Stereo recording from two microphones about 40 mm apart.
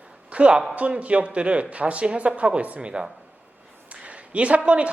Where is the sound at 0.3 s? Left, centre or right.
Right.